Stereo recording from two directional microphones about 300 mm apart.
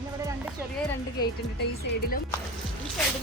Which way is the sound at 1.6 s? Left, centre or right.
Left.